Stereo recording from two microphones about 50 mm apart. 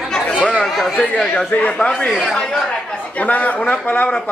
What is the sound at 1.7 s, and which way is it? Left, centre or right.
Speech, left.